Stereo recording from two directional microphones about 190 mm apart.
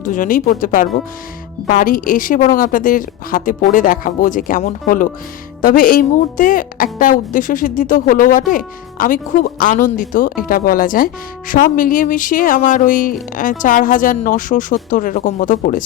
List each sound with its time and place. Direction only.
0.0 s a woman's voice: 45° left (ahead or behind)